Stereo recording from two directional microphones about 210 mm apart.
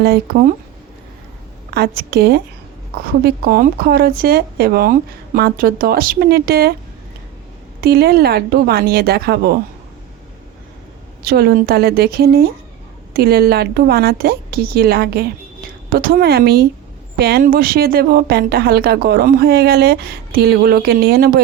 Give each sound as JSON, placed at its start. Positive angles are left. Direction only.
{"t": 2.0, "sound": "speech", "side_deg": -50}
{"t": 7.8, "sound": "speech", "side_deg": -50}
{"t": 11.2, "sound": "speech", "side_deg": -45}